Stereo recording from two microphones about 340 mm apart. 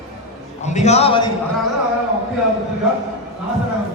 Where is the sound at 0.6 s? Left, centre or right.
Centre.